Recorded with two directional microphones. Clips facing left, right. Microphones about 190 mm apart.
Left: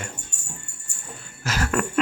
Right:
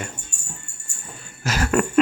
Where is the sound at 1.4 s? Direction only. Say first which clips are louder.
Right 4 dB; 15° right (ahead or behind).